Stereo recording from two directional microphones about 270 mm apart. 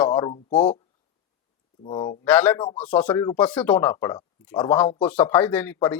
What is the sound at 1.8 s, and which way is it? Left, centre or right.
Speech, centre.